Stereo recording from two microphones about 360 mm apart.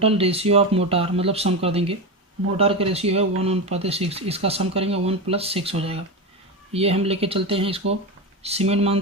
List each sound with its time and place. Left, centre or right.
0.0 s speech: centre
6.7 s speech: centre